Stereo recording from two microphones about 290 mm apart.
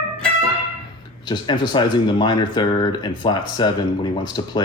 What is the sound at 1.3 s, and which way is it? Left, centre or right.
Speech, centre.